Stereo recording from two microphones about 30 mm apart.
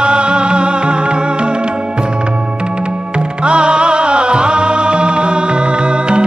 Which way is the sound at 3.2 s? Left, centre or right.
Right.